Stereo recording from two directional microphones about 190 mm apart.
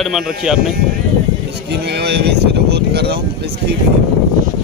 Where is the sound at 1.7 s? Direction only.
60° right (ahead or behind).